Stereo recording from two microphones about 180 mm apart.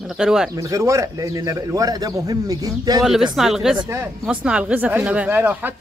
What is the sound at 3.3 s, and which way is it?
Speech, centre (ahead or behind).